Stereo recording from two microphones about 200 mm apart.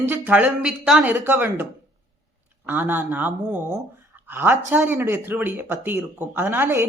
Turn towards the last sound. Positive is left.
turn(degrees=-10)  # may be behind; listen again after turning